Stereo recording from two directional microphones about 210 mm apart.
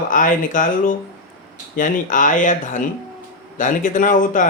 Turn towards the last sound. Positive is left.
turn(degrees=40)  # may be behind; listen again after turning